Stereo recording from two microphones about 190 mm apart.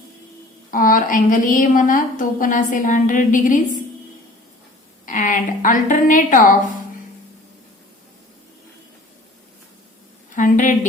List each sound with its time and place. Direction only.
0.7 s a woman's voice: 45° left (ahead or behind)
5.0 s a woman's voice: 45° left (ahead or behind)
10.3 s a woman's voice: 45° left (ahead or behind)